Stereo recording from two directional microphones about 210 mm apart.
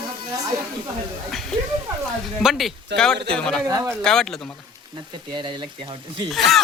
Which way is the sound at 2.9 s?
5° left (ahead or behind).